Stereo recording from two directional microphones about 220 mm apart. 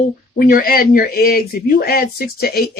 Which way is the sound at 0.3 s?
40° left (ahead or behind).